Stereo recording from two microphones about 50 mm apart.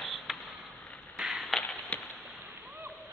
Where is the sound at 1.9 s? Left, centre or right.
Left.